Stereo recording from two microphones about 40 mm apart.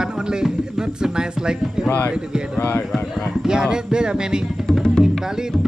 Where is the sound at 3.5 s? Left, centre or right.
Centre.